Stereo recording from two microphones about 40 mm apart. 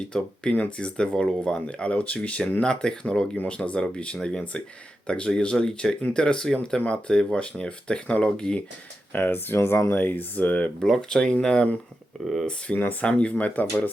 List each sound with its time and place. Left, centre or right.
0.8 s speech: left
2.6 s speech: left
9.1 s speech: left
10.0 s speech: left
10.8 s speech: centre
11.4 s speech: left
12.2 s speech: centre
12.7 s speech: left
13.1 s speech: left
13.6 s speech: left